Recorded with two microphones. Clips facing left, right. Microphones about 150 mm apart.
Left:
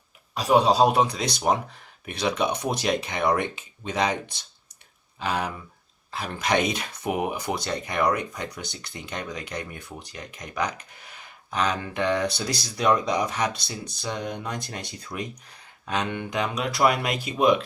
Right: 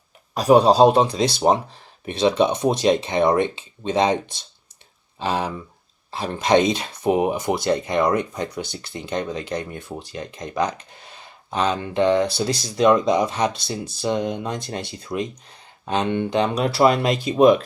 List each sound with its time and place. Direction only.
0.3 s speech: 40° right (ahead or behind)